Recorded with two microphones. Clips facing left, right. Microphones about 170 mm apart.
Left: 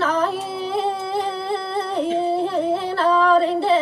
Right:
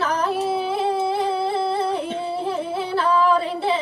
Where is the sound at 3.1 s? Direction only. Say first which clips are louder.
Left 4 dB; 25° left (ahead or behind).